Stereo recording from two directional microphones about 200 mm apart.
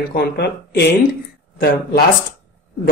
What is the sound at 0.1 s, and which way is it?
Speech, 55° left (ahead or behind).